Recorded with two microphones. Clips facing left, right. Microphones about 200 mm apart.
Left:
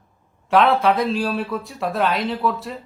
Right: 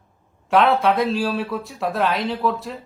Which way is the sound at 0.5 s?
Centre (ahead or behind).